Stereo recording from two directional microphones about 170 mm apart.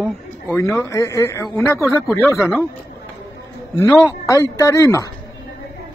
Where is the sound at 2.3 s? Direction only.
15° left (ahead or behind).